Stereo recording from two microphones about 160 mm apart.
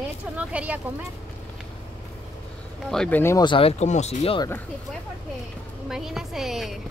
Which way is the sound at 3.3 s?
30° left (ahead or behind).